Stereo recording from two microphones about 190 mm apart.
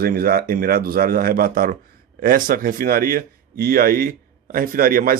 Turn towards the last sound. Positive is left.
turn(degrees=-50)  # may be behind; listen again after turning